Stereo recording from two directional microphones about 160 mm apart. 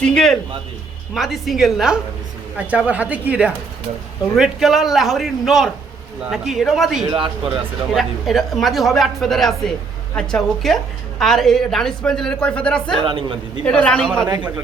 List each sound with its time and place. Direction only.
0.0 s a woman's voice: 5° left (ahead or behind)
7.1 s speech: 35° right (ahead or behind)
7.5 s a woman's voice: centre (ahead or behind)
13.0 s speech: 35° right (ahead or behind)
13.7 s a man's voice: 5° left (ahead or behind)